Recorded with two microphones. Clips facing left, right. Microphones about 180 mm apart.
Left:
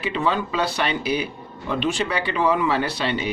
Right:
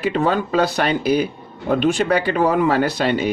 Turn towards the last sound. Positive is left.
turn(degrees=-45)  # may be behind; listen again after turning